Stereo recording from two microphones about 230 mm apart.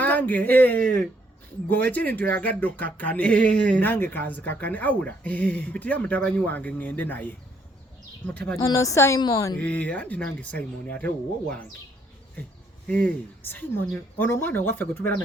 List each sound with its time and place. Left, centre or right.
0.0 s speech: centre
9.6 s speech: centre
12.9 s speech: centre